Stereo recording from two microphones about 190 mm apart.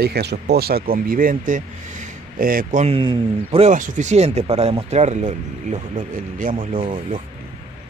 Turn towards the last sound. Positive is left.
turn(degrees=-25)  # may be behind; listen again after turning